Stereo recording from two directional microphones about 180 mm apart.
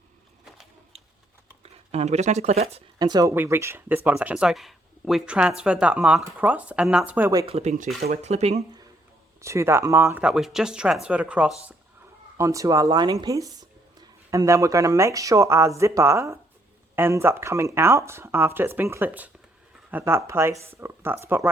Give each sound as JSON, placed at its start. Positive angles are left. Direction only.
{"t": 1.6, "sound": "speech", "side_deg": -35}
{"t": 3.0, "sound": "speech", "side_deg": -20}
{"t": 7.4, "sound": "speech", "side_deg": -35}
{"t": 9.4, "sound": "speech", "side_deg": -15}
{"t": 12.4, "sound": "speech", "side_deg": -15}